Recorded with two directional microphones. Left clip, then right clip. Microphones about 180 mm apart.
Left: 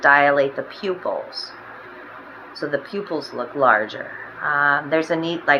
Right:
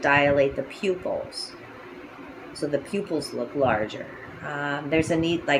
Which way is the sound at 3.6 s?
25° right (ahead or behind).